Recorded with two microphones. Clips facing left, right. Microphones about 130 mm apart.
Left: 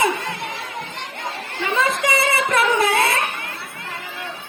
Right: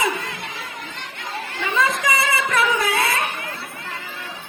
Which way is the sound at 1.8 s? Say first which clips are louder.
Left 1 dB; 25° left (ahead or behind).